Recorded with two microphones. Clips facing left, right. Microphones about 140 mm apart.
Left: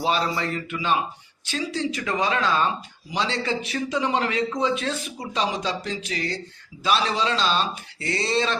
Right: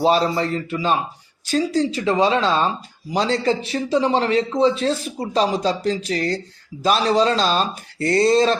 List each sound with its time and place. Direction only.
0.0 s speech: 35° right (ahead or behind)
2.0 s speech: 25° right (ahead or behind); by 8.5 s 40° right (ahead or behind)